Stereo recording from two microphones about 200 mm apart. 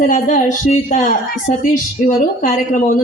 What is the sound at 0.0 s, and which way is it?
Speech, 40° left (ahead or behind).